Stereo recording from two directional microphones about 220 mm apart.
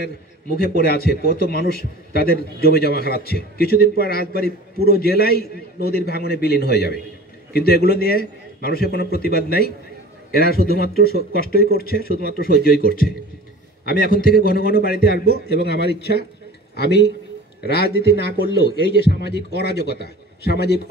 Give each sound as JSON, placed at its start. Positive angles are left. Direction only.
{"t": 0.0, "sound": "a man's voice", "side_deg": 45}
{"t": 19.2, "sound": "a man's voice", "side_deg": 50}